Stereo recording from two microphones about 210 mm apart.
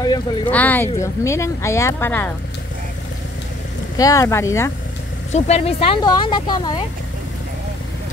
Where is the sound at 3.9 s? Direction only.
15° left (ahead or behind).